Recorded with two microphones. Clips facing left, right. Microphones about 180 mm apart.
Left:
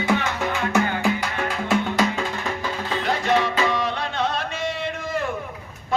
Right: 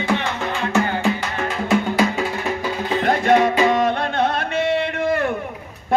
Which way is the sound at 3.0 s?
55° right (ahead or behind).